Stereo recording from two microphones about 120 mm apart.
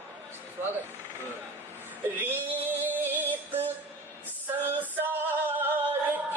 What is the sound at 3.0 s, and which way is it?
Synthetic singing, 15° right (ahead or behind).